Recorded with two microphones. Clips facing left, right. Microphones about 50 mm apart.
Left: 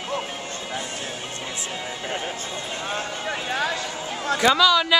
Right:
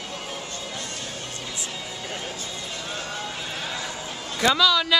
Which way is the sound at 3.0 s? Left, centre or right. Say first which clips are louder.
Left 4 dB; left.